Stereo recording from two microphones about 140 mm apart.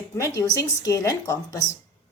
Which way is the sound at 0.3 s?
25° left (ahead or behind).